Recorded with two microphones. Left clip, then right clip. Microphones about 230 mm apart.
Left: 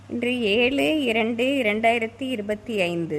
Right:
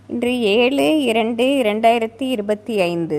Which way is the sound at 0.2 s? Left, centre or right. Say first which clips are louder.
Right 5 dB; centre.